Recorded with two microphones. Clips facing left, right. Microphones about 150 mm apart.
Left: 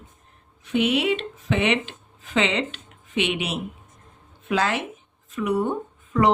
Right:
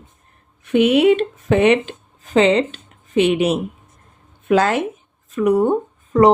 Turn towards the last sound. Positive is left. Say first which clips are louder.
# right 7 dB
turn(degrees=-40)  # may be behind; listen again after turning